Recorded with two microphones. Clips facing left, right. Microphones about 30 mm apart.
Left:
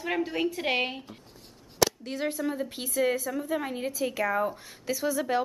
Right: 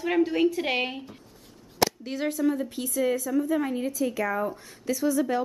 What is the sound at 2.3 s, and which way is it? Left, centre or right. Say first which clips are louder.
A woman's voice: right 8 dB; centre.